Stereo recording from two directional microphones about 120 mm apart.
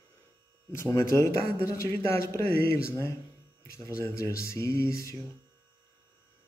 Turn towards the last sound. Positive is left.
turn(degrees=25)  # may be behind; listen again after turning